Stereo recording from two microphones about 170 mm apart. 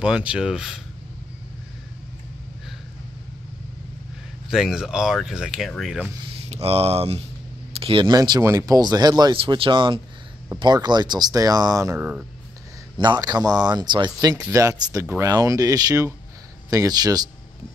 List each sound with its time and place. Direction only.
0.0 s speech: 5° right (ahead or behind)
4.5 s speech: centre (ahead or behind)
6.5 s speech: 35° right (ahead or behind); by 12.3 s 10° right (ahead or behind)
12.9 s speech: 25° right (ahead or behind)